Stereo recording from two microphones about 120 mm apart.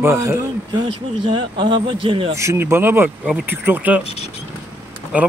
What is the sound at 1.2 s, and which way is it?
Speech, 40° right (ahead or behind).